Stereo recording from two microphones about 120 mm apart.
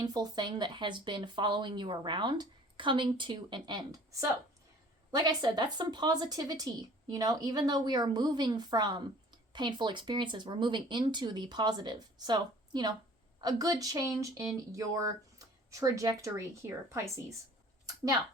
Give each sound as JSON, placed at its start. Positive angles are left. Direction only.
{"t": 0.0, "sound": "a woman's voice", "side_deg": -35}
{"t": 17.8, "sound": "speech", "side_deg": -30}